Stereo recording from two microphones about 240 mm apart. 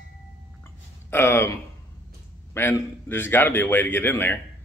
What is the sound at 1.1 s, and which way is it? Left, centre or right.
A man's voice, centre.